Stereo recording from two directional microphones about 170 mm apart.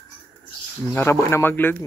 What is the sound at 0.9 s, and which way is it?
Speech, 15° left (ahead or behind).